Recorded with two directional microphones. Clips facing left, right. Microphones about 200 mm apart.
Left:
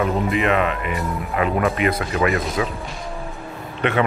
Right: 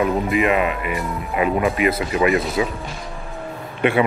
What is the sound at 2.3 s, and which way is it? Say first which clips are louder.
Speech: right 3 dB; centre (ahead or behind).